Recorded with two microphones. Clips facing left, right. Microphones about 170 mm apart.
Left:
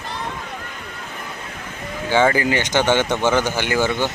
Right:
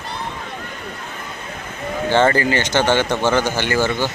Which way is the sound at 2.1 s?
10° left (ahead or behind).